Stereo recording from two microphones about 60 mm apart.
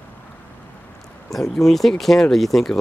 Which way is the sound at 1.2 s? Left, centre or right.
Centre.